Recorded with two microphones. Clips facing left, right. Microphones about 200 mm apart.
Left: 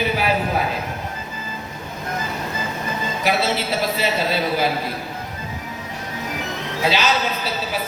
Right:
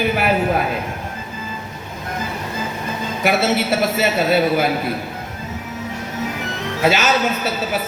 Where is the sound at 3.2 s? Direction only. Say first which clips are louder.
Right 4 dB; 55° right (ahead or behind).